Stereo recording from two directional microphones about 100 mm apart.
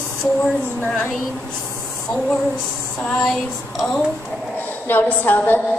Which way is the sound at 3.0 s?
5° left (ahead or behind).